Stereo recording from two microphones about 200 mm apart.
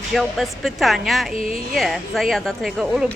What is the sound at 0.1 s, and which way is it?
Speech, centre (ahead or behind).